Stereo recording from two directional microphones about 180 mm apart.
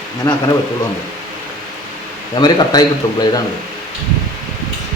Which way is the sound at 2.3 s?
25° left (ahead or behind).